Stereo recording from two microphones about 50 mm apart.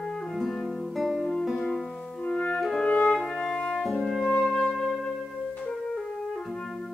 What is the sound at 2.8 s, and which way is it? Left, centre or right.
Music, left.